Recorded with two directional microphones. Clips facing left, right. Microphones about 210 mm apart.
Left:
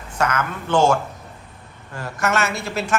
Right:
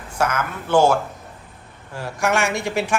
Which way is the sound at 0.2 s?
10° right (ahead or behind).